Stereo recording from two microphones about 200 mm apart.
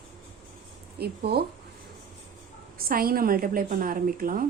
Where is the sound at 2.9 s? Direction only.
45° right (ahead or behind).